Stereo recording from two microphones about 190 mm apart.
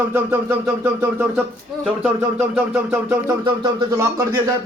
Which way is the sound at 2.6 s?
10° right (ahead or behind).